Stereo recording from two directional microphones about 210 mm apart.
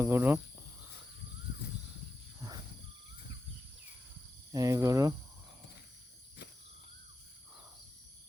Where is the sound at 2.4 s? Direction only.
15° right (ahead or behind).